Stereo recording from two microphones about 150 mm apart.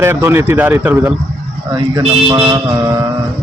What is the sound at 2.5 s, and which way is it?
Speech, 20° right (ahead or behind).